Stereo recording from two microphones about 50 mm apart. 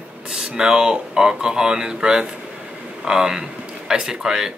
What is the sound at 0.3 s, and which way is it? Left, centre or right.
Speech, centre.